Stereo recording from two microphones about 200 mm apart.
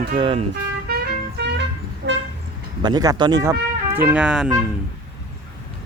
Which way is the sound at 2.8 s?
20° right (ahead or behind).